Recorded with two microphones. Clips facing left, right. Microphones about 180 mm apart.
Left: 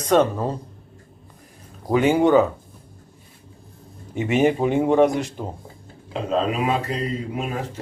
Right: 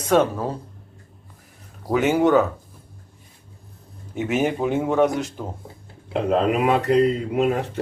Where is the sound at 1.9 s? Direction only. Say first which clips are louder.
Left 1 dB; centre (ahead or behind).